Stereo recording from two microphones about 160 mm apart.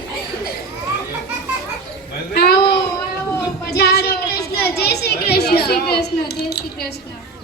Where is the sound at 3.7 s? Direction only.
90° left.